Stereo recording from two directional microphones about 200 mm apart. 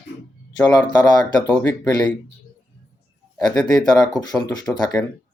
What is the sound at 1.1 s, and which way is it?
Speech, 20° left (ahead or behind).